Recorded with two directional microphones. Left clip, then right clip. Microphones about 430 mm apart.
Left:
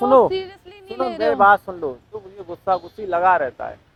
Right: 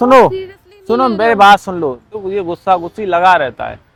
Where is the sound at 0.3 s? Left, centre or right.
Left.